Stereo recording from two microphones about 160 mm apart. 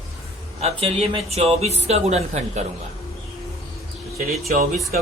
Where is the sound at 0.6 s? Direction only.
35° right (ahead or behind).